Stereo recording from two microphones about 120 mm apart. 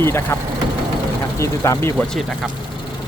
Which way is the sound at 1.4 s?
25° left (ahead or behind).